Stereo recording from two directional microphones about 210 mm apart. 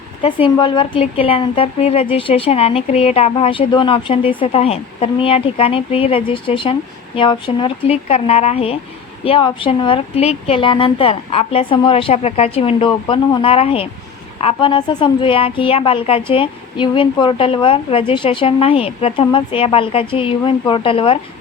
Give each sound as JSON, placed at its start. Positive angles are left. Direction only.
{"t": 0.4, "sound": "a woman's voice", "side_deg": 20}